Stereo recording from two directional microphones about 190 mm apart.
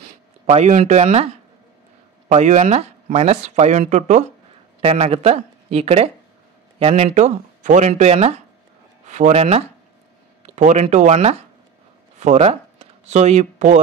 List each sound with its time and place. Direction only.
0.5 s speech: 35° right (ahead or behind)